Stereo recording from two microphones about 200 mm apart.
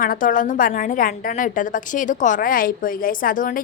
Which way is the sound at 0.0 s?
45° left (ahead or behind).